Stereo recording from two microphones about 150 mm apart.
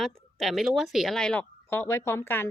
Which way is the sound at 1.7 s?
15° left (ahead or behind).